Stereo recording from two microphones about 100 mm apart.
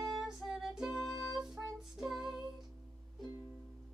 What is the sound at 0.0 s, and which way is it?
Music, 5° right (ahead or behind).